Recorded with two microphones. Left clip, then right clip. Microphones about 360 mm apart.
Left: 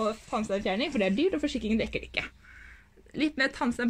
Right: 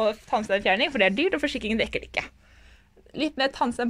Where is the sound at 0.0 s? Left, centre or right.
Right.